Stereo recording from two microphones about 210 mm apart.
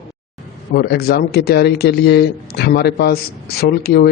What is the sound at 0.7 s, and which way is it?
A man's voice, 45° left (ahead or behind).